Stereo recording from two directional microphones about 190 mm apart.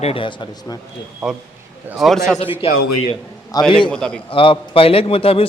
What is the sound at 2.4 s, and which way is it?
Speech, 30° left (ahead or behind).